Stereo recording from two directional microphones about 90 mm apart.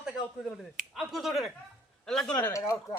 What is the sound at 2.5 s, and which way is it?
Speech, 35° left (ahead or behind).